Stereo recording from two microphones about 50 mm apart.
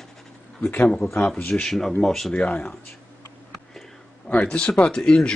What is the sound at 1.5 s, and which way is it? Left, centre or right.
Speech, centre.